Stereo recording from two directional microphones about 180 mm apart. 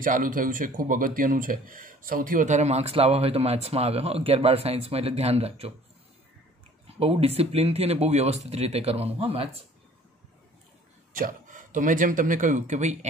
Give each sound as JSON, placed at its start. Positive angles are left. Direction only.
{"t": 0.0, "sound": "speech", "side_deg": -50}
{"t": 6.9, "sound": "speech", "side_deg": -35}
{"t": 11.1, "sound": "speech", "side_deg": -45}